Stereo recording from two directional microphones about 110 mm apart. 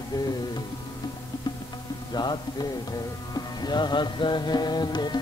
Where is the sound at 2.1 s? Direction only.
40° left (ahead or behind).